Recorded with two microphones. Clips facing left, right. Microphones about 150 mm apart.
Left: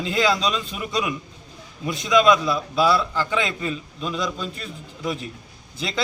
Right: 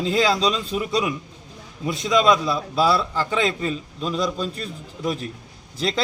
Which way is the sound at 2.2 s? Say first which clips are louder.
Left 1 dB; 25° right (ahead or behind).